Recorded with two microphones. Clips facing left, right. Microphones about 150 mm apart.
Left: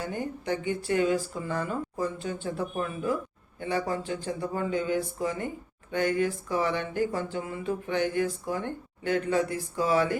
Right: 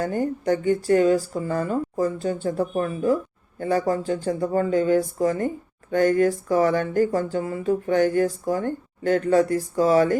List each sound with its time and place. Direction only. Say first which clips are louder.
0.0 s speech: right 9 dB; 45° right (ahead or behind)